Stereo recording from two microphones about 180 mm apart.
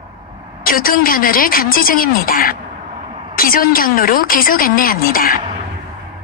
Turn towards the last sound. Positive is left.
turn(degrees=50)  # may be behind; listen again after turning